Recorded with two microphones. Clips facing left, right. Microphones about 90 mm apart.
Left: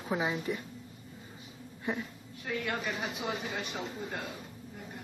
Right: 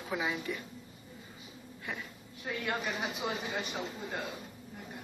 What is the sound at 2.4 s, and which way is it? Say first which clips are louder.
Speech: left 1 dB; 10° right (ahead or behind).